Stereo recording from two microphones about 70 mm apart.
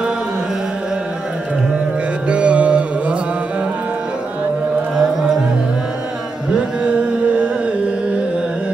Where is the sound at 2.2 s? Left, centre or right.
Centre.